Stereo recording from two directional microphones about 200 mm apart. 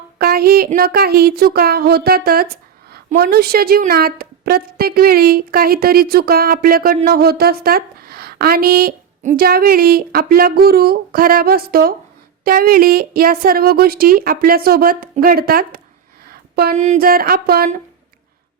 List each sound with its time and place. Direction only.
0.2 s a woman's voice: 50° right (ahead or behind)
16.2 s a sound: 50° right (ahead or behind)
16.7 s a woman's voice: 35° right (ahead or behind)